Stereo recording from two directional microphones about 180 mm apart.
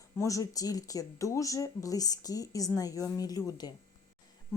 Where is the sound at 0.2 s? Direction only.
20° left (ahead or behind).